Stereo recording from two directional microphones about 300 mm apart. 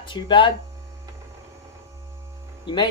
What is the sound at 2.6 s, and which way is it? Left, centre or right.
Speech, centre.